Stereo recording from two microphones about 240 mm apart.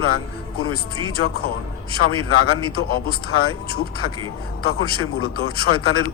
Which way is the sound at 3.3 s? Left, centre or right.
Left.